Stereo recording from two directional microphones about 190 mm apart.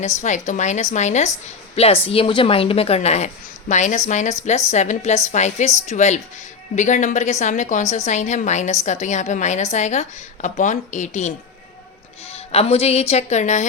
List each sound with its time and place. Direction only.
0.2 s a woman's voice: 40° left (ahead or behind)